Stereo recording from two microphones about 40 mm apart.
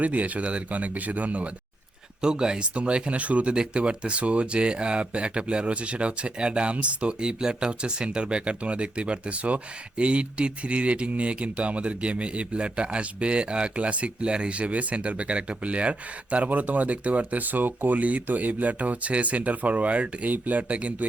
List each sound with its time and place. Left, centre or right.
0.0 s speech: right
2.2 s speech: centre
2.7 s speech: right
3.5 s speech: right
20.3 s speech: right